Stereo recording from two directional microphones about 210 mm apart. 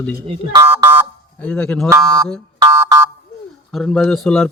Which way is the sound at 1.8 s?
15° right (ahead or behind).